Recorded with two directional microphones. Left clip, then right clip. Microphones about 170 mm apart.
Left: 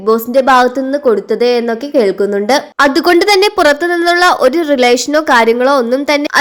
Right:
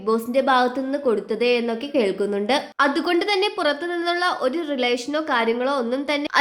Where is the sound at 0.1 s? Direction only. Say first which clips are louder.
Left 10 dB; 30° left (ahead or behind).